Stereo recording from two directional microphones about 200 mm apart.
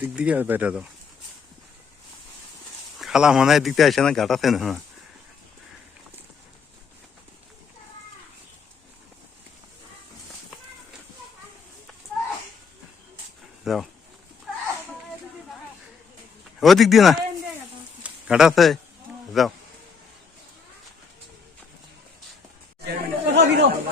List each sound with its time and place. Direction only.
0.0 s speech: 5° right (ahead or behind)
3.0 s a man's voice: 5° right (ahead or behind)
13.7 s speech: centre (ahead or behind)
16.6 s speech: centre (ahead or behind)
18.0 s a sound: 5° right (ahead or behind)
19.3 s a man's voice: centre (ahead or behind)
22.8 s chatter: 55° right (ahead or behind)